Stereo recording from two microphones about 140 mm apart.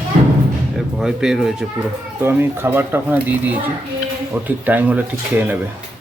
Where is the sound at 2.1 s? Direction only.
15° right (ahead or behind).